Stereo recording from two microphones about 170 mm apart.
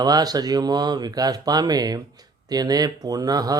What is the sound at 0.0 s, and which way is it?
Speech, 25° right (ahead or behind).